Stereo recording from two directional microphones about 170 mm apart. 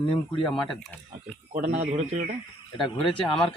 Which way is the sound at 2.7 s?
30° left (ahead or behind).